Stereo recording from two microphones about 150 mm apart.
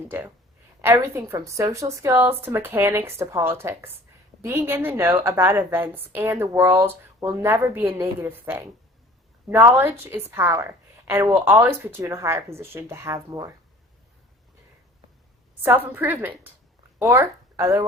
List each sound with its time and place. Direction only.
0.8 s a woman's voice: 15° right (ahead or behind)
15.6 s a woman's voice: 15° right (ahead or behind)